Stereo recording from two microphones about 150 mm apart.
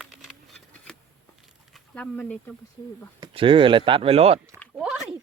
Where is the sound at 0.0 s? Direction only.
Centre (ahead or behind).